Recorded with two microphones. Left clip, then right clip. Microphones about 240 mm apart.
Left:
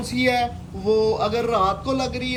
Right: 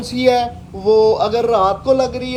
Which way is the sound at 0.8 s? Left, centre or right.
Right.